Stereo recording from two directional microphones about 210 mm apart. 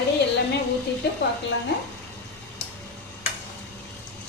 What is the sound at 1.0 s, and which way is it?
Music, 55° left (ahead or behind).